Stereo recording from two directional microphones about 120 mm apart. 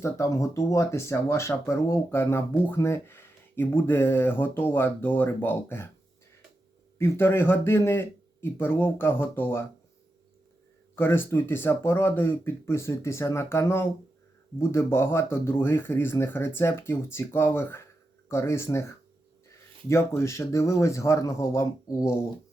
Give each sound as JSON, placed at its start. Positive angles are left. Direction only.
{"t": 0.0, "sound": "speech", "side_deg": 25}
{"t": 7.0, "sound": "speech", "side_deg": 20}
{"t": 10.9, "sound": "speech", "side_deg": 20}
{"t": 19.9, "sound": "speech", "side_deg": 20}